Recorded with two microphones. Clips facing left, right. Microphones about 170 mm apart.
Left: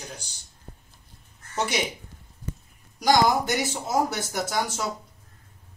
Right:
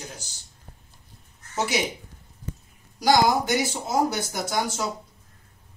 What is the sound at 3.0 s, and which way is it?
Speech, 5° right (ahead or behind).